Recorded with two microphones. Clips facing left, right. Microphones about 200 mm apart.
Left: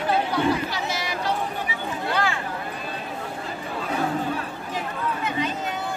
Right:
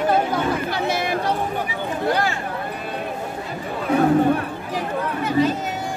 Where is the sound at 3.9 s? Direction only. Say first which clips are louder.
Right 10 dB; 60° right (ahead or behind).